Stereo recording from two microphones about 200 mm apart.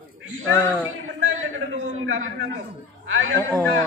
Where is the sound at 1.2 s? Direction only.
90° right.